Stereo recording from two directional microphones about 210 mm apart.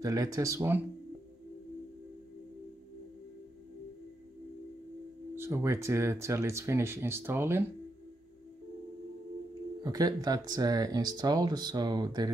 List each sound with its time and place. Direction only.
0.0 s speech: 15° right (ahead or behind)
5.3 s speech: 15° right (ahead or behind)
9.8 s speech: 15° right (ahead or behind)